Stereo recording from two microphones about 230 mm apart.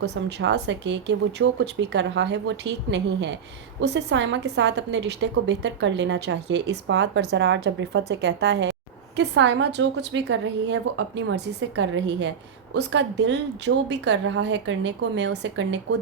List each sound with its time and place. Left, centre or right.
0.0 s a woman's voice: right